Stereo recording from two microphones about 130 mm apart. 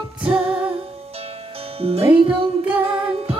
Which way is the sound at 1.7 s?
50° right (ahead or behind).